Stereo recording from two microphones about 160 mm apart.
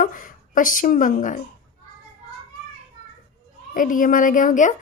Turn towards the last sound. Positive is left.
turn(degrees=55)  # may be behind; listen again after turning